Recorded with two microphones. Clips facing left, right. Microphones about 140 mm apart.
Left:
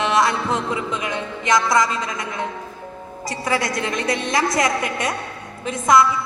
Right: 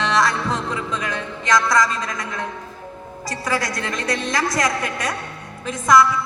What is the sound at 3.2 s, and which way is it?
A woman's voice, 25° left (ahead or behind).